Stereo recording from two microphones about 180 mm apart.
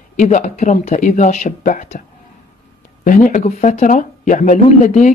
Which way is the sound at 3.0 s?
45° left (ahead or behind).